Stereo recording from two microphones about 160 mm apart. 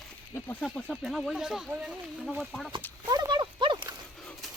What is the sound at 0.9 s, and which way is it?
Speech, centre (ahead or behind).